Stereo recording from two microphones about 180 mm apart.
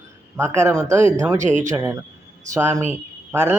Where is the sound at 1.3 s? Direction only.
45° right (ahead or behind).